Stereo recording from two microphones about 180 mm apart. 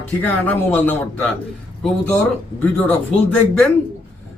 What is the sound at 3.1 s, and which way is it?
Speech, 5° left (ahead or behind).